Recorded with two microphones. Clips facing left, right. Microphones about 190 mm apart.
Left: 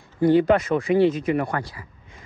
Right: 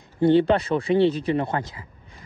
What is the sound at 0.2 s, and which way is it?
Speech, 30° right (ahead or behind).